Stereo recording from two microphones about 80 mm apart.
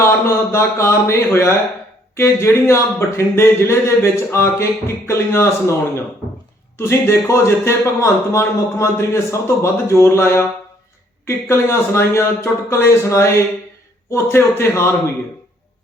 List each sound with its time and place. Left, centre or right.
0.0 s speech: left
6.7 s speech: left